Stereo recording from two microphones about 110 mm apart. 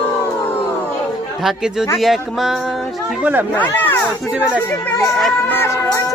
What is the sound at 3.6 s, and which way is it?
Speech, 15° left (ahead or behind).